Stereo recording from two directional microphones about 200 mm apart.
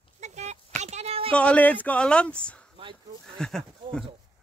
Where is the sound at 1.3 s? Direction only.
5° left (ahead or behind).